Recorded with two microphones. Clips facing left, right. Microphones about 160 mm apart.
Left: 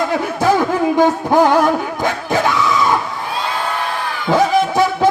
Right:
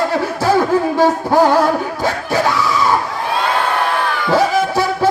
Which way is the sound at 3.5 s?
70° right (ahead or behind).